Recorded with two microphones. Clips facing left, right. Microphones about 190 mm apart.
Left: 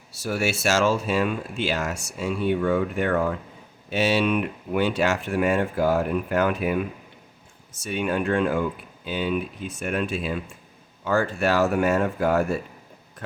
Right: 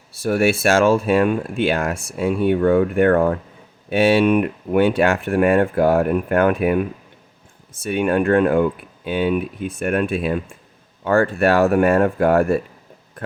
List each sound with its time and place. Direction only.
0.1 s speech: 55° right (ahead or behind)